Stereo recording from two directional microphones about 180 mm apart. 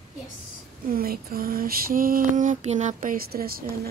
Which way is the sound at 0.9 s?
55° right (ahead or behind).